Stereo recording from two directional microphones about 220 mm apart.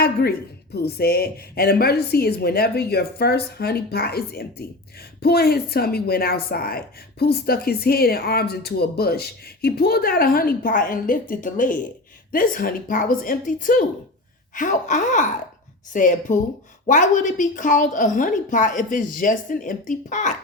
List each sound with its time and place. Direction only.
0.0 s a woman's voice: 45° left (ahead or behind)